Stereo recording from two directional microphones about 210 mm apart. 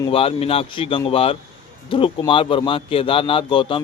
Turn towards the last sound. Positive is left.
turn(degrees=25)  # may be behind; listen again after turning